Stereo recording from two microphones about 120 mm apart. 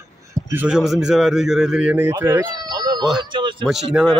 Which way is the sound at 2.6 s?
35° right (ahead or behind).